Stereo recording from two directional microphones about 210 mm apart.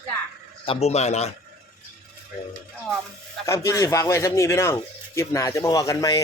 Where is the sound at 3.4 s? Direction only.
15° left (ahead or behind).